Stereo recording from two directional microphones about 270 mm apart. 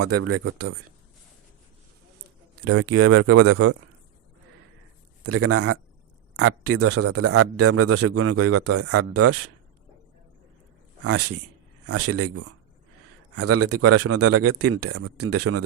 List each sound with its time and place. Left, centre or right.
0.0 s a man's voice: right
2.6 s a man's voice: right
5.2 s a man's voice: right
11.0 s a man's voice: right